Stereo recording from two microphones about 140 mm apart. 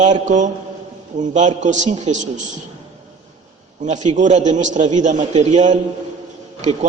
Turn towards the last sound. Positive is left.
turn(degrees=-55)  # may be behind; listen again after turning